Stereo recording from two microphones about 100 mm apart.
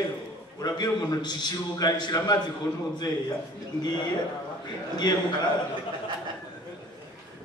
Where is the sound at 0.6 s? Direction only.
45° left (ahead or behind).